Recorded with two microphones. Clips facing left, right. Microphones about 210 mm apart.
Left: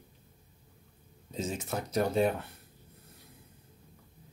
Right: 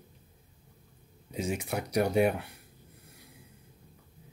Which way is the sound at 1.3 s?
15° right (ahead or behind).